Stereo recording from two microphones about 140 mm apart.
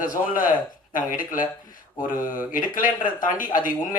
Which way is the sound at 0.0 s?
75° left (ahead or behind).